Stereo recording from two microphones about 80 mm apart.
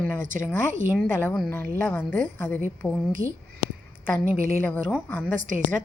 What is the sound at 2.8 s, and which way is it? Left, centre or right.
Speech, centre.